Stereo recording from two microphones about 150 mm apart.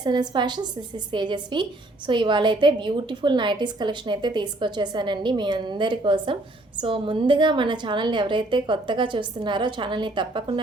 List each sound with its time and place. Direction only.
0.0 s a woman's voice: 30° right (ahead or behind)